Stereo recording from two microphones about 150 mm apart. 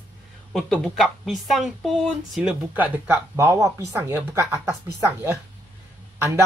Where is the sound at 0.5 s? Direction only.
Centre (ahead or behind).